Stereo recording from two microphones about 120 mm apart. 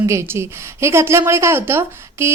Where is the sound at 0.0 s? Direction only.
25° right (ahead or behind).